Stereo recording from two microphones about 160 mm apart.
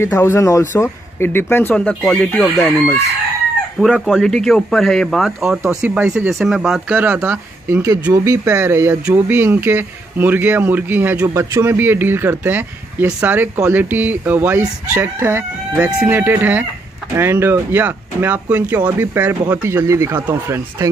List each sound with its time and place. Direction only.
0.0 s speech: 15° left (ahead or behind)
3.8 s speech: centre (ahead or behind)